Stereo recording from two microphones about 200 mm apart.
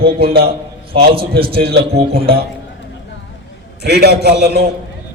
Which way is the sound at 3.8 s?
55° right (ahead or behind).